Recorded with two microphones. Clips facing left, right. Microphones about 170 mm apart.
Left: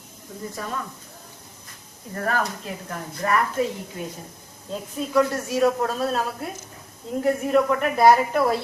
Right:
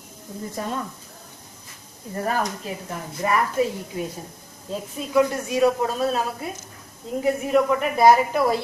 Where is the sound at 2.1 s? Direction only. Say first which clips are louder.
Right 1 dB; 15° right (ahead or behind).